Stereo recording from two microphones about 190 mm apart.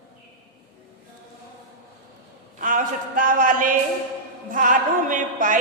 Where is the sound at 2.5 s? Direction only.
45° right (ahead or behind).